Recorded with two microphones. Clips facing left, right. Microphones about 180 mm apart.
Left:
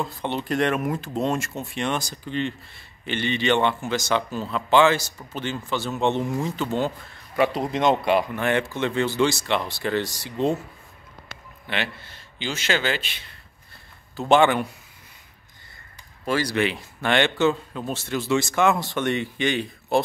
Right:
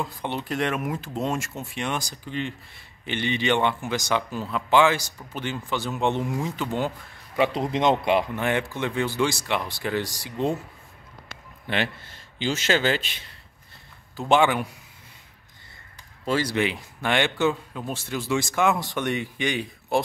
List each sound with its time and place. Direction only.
0.0 s speech: 10° right (ahead or behind)
8.4 s speech: 15° right (ahead or behind)
11.6 s a man's voice: 40° right (ahead or behind)
14.3 s speech: 10° right (ahead or behind)
16.3 s speech: 25° right (ahead or behind)